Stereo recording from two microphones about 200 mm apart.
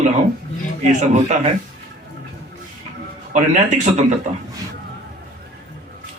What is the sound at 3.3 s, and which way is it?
Speech, 35° right (ahead or behind).